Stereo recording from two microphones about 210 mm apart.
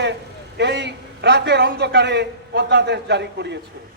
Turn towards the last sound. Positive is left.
turn(degrees=-55)  # may be behind; listen again after turning